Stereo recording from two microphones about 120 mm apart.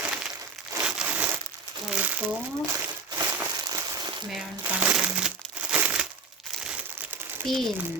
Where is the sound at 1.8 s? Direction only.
10° right (ahead or behind).